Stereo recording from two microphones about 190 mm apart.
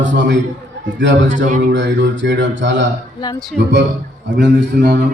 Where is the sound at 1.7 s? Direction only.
70° right (ahead or behind).